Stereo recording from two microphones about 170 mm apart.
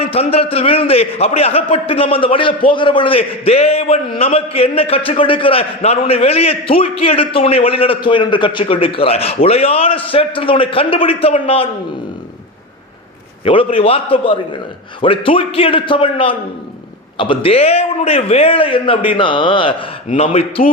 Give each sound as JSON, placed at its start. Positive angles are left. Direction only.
{"t": 0.0, "sound": "a man's voice", "side_deg": 35}
{"t": 13.4, "sound": "a man's voice", "side_deg": 30}